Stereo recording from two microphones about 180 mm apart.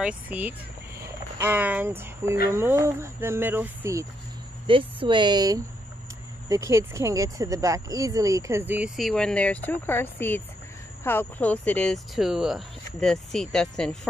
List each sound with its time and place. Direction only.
0.0 s speech: 10° right (ahead or behind)
4.6 s a woman's voice: 25° right (ahead or behind); by 13.9 s 5° left (ahead or behind)